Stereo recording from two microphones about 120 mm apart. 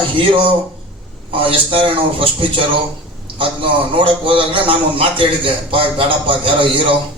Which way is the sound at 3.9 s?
45° right (ahead or behind).